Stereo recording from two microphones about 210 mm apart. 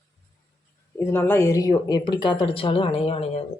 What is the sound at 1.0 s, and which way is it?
Speech, 10° left (ahead or behind).